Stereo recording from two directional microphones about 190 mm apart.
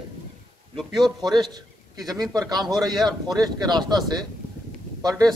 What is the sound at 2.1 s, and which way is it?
Speech, 20° right (ahead or behind).